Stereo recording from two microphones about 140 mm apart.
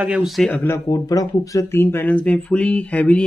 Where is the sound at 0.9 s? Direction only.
25° left (ahead or behind); by 3.3 s 10° left (ahead or behind).